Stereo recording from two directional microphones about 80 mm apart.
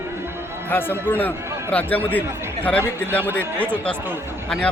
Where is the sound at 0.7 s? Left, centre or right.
Left.